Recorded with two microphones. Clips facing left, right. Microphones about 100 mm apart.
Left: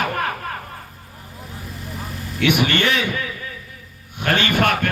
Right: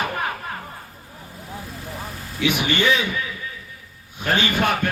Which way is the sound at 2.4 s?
65° left (ahead or behind).